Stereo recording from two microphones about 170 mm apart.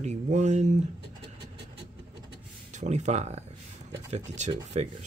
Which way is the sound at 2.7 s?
45° right (ahead or behind).